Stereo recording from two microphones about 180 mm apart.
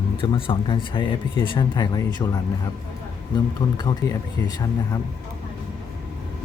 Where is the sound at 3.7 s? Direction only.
20° left (ahead or behind).